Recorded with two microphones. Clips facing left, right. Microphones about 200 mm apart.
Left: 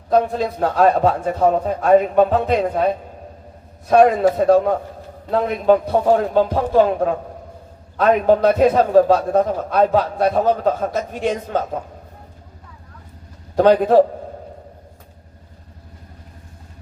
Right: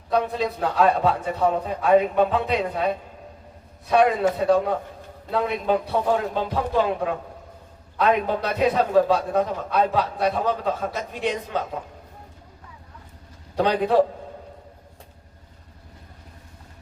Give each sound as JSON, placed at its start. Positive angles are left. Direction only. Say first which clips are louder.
{"t": 0.1, "sound": "a man's voice", "louder": "left 5 dB", "side_deg": 45}
{"t": 13.6, "sound": "a man's voice", "louder": "left 7 dB", "side_deg": 45}